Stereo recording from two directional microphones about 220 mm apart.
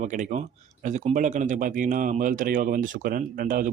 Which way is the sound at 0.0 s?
35° right (ahead or behind).